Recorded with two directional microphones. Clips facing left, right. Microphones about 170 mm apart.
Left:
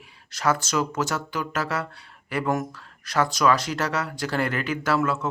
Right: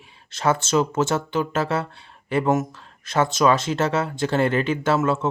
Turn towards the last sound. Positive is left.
turn(degrees=-25)  # may be behind; listen again after turning